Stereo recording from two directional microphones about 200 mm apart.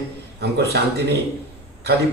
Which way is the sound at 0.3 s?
55° right (ahead or behind).